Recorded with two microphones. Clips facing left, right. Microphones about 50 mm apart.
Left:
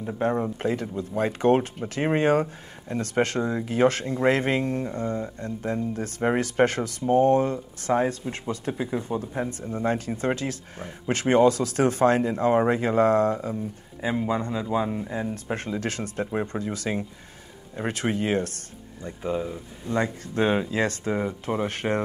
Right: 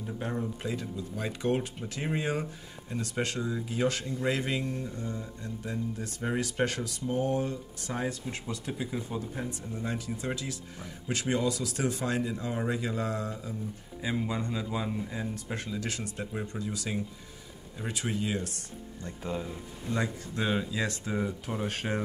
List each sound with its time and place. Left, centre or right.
0.0 s speech: left
14.0 s speech: left
19.0 s speech: centre
19.9 s speech: left